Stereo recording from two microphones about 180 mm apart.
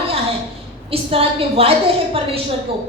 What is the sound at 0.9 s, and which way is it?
Speech, 30° right (ahead or behind).